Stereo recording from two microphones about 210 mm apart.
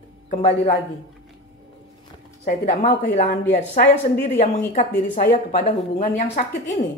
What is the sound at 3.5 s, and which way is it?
Speech, 45° left (ahead or behind).